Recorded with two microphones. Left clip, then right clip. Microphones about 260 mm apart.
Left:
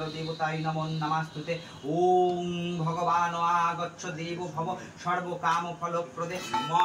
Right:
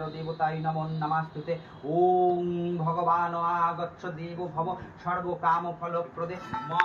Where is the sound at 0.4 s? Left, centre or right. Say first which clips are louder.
Right 2 dB; left.